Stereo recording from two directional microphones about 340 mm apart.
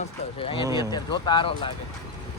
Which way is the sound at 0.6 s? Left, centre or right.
Centre.